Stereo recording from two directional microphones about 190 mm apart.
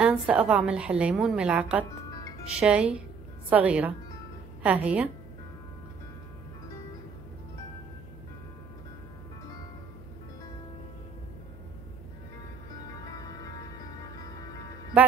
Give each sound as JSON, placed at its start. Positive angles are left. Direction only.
{"t": 0.0, "sound": "a woman's voice", "side_deg": -5}
{"t": 13.0, "sound": "music", "side_deg": 20}